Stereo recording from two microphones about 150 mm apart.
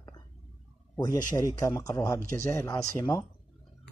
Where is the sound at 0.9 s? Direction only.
25° left (ahead or behind).